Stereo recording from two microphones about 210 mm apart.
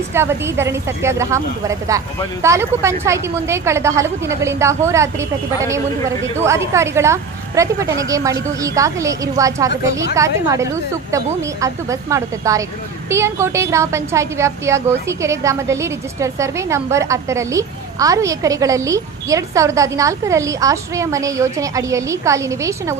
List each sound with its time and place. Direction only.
0.1 s a woman's voice: 10° right (ahead or behind)